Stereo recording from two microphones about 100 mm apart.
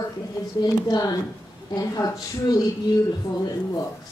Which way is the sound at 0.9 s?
40° left (ahead or behind).